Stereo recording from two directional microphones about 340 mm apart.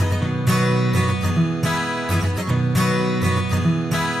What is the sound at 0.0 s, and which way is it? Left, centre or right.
Music, centre.